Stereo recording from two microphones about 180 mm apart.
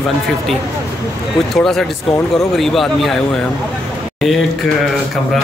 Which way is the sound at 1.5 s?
Centre (ahead or behind).